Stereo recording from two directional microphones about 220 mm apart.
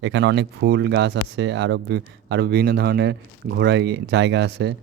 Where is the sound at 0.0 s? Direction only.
55° right (ahead or behind).